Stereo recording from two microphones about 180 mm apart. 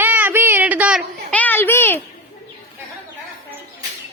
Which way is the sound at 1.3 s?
10° left (ahead or behind).